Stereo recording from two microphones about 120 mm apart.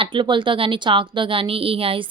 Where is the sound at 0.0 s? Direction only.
45° right (ahead or behind).